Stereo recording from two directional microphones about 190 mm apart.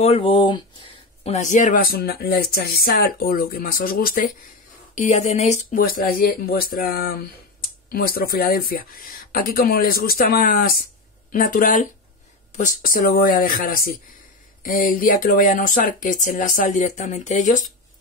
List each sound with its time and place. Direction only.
0.0 s speech: 30° left (ahead or behind)